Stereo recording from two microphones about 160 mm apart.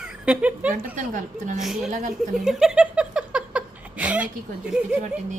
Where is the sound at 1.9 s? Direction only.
50° right (ahead or behind).